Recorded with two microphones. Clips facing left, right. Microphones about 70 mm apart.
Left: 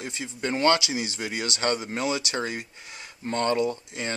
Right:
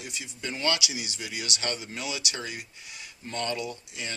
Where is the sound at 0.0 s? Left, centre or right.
Left.